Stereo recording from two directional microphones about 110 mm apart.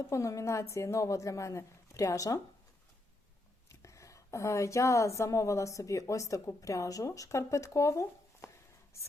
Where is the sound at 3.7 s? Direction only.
30° left (ahead or behind).